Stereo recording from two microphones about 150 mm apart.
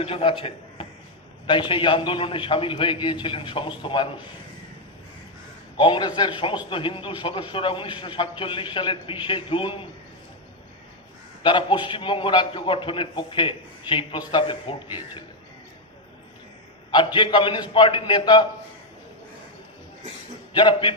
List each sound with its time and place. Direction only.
0.0 s a man's voice: 40° left (ahead or behind)
5.7 s a man's voice: 30° left (ahead or behind)
11.4 s a man's voice: 30° left (ahead or behind)
16.9 s a man's voice: 30° left (ahead or behind)
20.5 s a man's voice: 30° left (ahead or behind)